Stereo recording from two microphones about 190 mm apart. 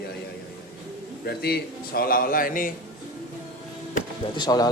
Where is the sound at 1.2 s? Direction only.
55° left (ahead or behind).